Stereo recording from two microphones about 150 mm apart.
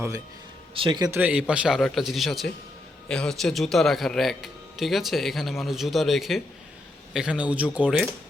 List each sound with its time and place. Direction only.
0.7 s a man's voice: 35° right (ahead or behind)
1.1 s a man's voice: 10° right (ahead or behind)